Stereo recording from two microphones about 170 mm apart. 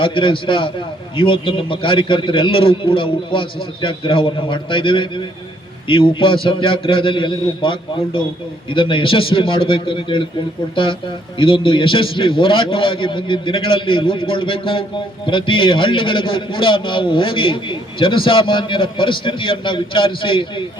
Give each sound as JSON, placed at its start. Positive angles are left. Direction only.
{"t": 0.0, "sound": "a man's voice", "side_deg": 30}
{"t": 11.3, "sound": "a man's voice", "side_deg": 30}